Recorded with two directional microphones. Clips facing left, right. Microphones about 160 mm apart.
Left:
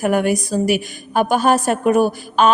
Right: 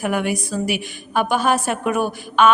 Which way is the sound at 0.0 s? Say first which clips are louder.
Left 5 dB; 45° left (ahead or behind).